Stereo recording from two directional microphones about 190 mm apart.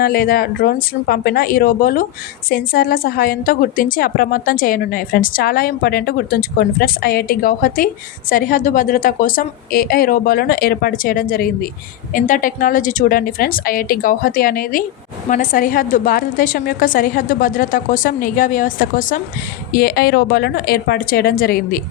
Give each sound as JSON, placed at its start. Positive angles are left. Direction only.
{"t": 0.0, "sound": "a woman's voice", "side_deg": 55}